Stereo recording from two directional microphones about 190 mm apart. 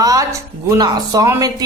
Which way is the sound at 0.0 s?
20° right (ahead or behind).